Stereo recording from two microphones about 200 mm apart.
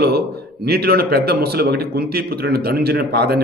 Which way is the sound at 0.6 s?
50° right (ahead or behind).